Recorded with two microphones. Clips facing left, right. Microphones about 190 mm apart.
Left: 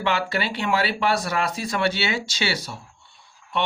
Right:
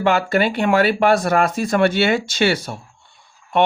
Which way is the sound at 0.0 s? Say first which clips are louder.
Right 7 dB; 45° right (ahead or behind).